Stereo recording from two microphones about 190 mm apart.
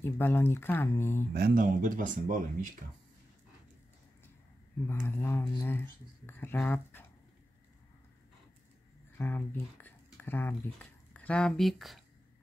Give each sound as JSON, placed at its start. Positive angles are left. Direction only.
{"t": 0.0, "sound": "speech", "side_deg": 10}
{"t": 1.3, "sound": "speech", "side_deg": -50}
{"t": 4.8, "sound": "speech", "side_deg": 10}
{"t": 9.2, "sound": "speech", "side_deg": 10}